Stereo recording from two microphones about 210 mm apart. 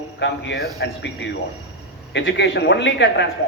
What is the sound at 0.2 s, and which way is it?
A man's voice, 55° left (ahead or behind).